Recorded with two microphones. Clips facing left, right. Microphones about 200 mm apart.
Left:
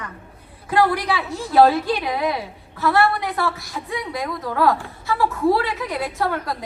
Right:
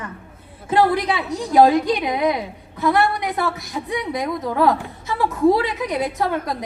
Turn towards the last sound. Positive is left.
turn(degrees=-20)  # may be behind; listen again after turning